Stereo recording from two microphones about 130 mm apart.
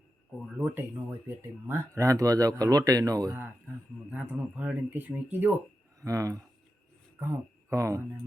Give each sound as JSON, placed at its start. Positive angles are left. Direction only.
{"t": 0.4, "sound": "speech", "side_deg": -10}
{"t": 4.1, "sound": "speech", "side_deg": -15}
{"t": 6.0, "sound": "speech", "side_deg": -25}